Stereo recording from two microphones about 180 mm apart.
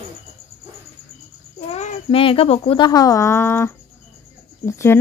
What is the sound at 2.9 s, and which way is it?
A woman's voice, 20° left (ahead or behind).